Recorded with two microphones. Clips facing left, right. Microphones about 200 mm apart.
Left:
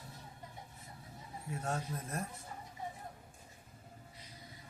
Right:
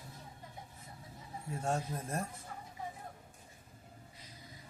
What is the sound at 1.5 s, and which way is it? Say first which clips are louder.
Speech: right 3 dB; 30° right (ahead or behind).